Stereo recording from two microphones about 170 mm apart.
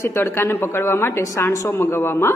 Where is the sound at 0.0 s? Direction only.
15° left (ahead or behind).